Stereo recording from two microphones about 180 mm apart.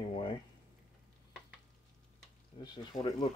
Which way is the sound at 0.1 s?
30° left (ahead or behind).